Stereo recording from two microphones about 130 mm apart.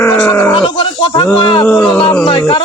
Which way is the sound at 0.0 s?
15° left (ahead or behind).